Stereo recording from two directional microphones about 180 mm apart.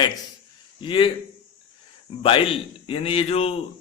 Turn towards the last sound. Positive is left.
turn(degrees=35)  # may be behind; listen again after turning